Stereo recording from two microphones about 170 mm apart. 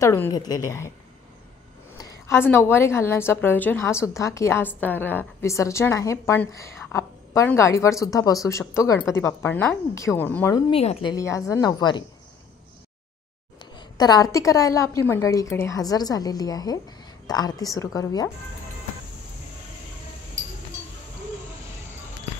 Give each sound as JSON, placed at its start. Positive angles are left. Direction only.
{"t": 0.0, "sound": "a woman's voice", "side_deg": 15}
{"t": 2.0, "sound": "a woman's voice", "side_deg": 15}
{"t": 10.7, "sound": "speech", "side_deg": 35}
{"t": 11.1, "sound": "a woman's voice", "side_deg": 20}
{"t": 13.7, "sound": "a woman's voice", "side_deg": 25}